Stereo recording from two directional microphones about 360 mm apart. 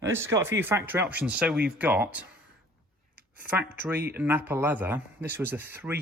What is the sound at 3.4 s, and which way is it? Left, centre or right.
Speech, centre.